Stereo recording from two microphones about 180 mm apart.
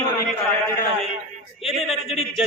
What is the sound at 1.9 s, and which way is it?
Speech, centre (ahead or behind).